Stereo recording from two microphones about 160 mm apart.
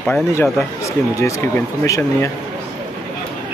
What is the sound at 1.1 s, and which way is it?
Speech, 20° left (ahead or behind).